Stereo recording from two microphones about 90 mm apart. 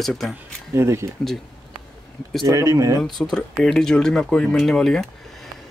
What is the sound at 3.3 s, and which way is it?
Speech, 5° left (ahead or behind).